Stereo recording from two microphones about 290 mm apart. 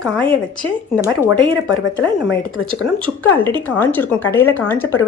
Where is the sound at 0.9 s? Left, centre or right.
Centre.